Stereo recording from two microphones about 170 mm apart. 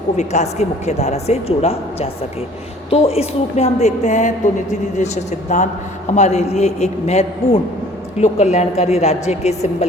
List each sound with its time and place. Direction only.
0.2 s speech: 40° left (ahead or behind)